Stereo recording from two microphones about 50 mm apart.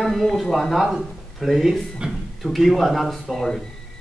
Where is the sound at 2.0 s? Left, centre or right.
Centre.